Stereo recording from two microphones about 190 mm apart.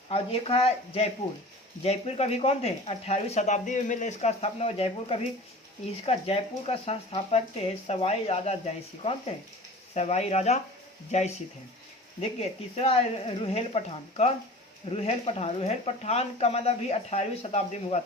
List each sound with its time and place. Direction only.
0.1 s speech: 30° left (ahead or behind)
12.4 s speech: 35° left (ahead or behind)